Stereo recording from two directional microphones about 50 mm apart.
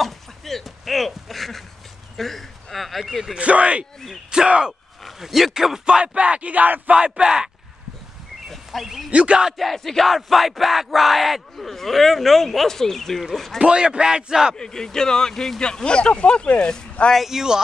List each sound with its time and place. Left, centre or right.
0.0 s a sound: centre
2.1 s speech: centre
3.3 s a man's voice: right
5.0 s a man's voice: centre
5.9 s speech: right
7.2 s a man's voice: centre
8.5 s speech: centre
9.1 s speech: right
9.5 s a sound: centre
13.6 s a man's voice: centre
14.6 s speech: centre
17.3 s a man's voice: centre